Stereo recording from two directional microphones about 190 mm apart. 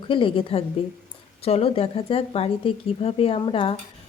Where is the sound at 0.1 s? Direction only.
25° left (ahead or behind).